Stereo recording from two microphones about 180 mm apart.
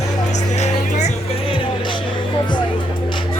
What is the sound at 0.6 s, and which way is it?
Speech, 40° left (ahead or behind).